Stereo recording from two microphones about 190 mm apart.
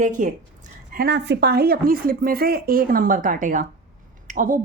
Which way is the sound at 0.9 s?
60° right (ahead or behind).